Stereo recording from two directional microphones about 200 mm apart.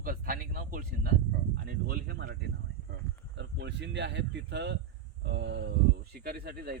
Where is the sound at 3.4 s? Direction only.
60° right (ahead or behind).